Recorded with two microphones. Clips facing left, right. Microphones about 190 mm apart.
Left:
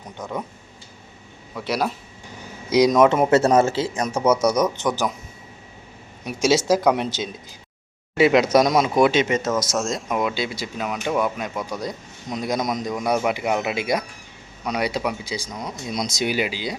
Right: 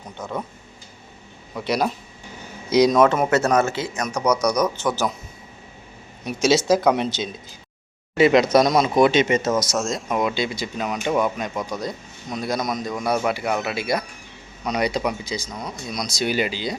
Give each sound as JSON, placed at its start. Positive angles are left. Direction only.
{"t": 0.2, "sound": "speech", "side_deg": 10}
{"t": 1.5, "sound": "speech", "side_deg": 5}
{"t": 6.2, "sound": "speech", "side_deg": 10}
{"t": 15.9, "sound": "speech", "side_deg": 25}
{"t": 16.3, "sound": "speech", "side_deg": 10}